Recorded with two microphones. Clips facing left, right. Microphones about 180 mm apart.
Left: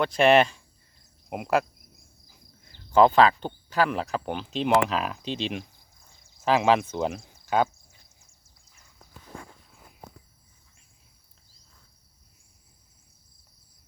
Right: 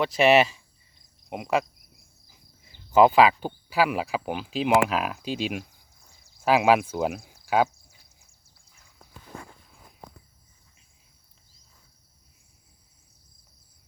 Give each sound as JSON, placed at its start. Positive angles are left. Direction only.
{"t": 0.0, "sound": "speech", "side_deg": -5}